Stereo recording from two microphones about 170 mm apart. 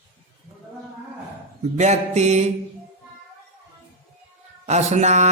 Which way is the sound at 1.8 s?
40° right (ahead or behind).